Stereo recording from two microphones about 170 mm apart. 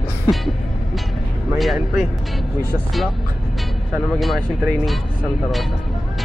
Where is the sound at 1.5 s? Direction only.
Centre (ahead or behind).